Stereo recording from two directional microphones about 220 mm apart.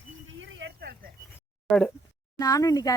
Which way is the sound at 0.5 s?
50° right (ahead or behind).